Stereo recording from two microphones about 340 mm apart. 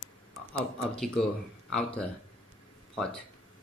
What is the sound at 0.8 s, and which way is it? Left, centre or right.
Speech, centre.